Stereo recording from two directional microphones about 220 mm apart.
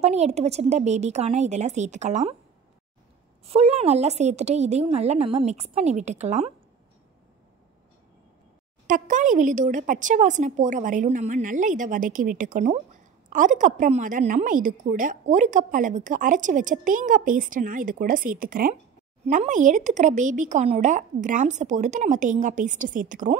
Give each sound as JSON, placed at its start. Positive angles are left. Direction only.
{"t": 0.0, "sound": "a woman's voice", "side_deg": -30}
{"t": 3.4, "sound": "a woman's voice", "side_deg": -25}
{"t": 8.8, "sound": "a woman's voice", "side_deg": -35}